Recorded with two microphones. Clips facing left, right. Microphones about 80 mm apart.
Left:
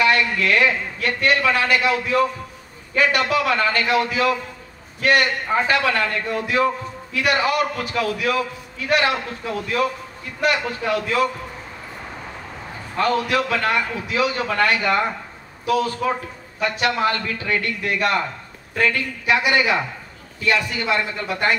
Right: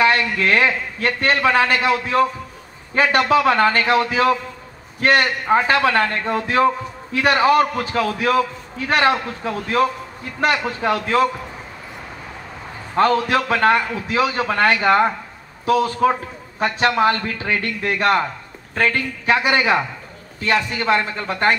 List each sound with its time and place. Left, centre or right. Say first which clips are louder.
0.0 s a man's voice: right 2 dB; right
12.9 s a man's voice: right 3 dB; right